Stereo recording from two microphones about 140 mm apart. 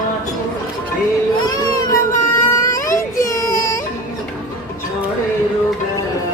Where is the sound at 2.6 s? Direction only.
20° left (ahead or behind).